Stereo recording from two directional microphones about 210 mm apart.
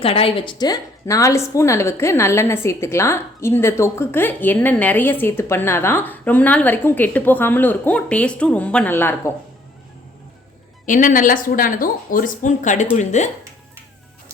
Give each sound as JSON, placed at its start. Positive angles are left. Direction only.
{"t": 0.0, "sound": "a woman's voice", "side_deg": 25}
{"t": 10.8, "sound": "speech", "side_deg": 40}